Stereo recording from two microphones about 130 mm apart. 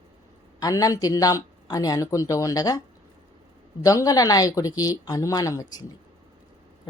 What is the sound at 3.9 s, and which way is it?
Speech, 25° left (ahead or behind).